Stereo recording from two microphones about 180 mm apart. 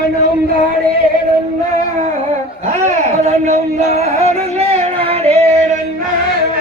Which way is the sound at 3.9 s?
35° right (ahead or behind).